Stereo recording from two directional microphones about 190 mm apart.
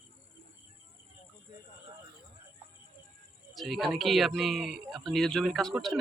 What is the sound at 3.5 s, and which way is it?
Speech, centre (ahead or behind).